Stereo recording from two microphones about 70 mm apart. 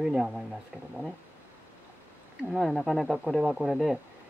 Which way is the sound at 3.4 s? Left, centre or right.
Centre.